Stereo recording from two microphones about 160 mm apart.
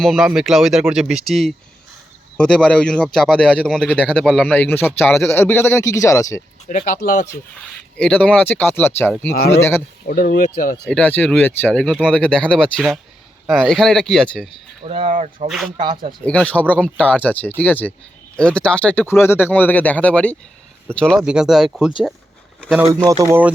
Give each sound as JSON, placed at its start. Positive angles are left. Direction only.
{"t": 0.0, "sound": "speech", "side_deg": 0}
{"t": 6.7, "sound": "speech", "side_deg": 60}
{"t": 7.9, "sound": "speech", "side_deg": 10}
{"t": 10.1, "sound": "speech", "side_deg": 70}
{"t": 10.8, "sound": "speech", "side_deg": 10}
{"t": 14.8, "sound": "speech", "side_deg": -35}
{"t": 15.1, "sound": "speech", "side_deg": -45}
{"t": 15.4, "sound": "speech", "side_deg": 0}
{"t": 16.2, "sound": "speech", "side_deg": 10}
{"t": 23.2, "sound": "speech", "side_deg": -15}